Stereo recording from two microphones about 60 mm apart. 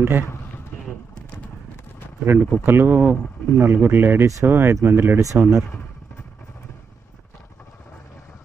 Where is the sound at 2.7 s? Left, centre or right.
Right.